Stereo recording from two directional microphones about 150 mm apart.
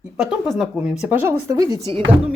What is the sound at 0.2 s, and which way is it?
Speech, centre (ahead or behind).